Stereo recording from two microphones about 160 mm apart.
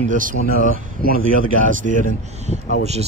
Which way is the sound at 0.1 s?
55° right (ahead or behind).